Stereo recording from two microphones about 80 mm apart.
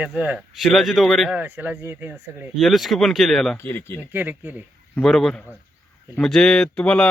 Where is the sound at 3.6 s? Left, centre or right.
Left.